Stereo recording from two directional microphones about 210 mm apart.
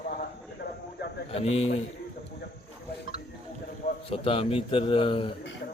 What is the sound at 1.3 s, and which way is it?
Speech, 30° left (ahead or behind).